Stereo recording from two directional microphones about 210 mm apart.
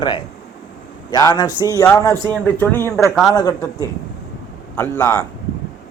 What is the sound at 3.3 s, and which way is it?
A man's voice, 15° left (ahead or behind).